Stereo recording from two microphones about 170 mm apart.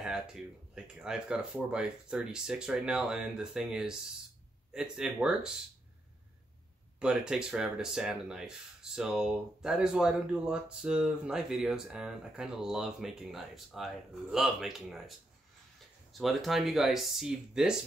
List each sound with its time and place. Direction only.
0.0 s speech: 5° right (ahead or behind)
7.0 s speech: 5° right (ahead or behind)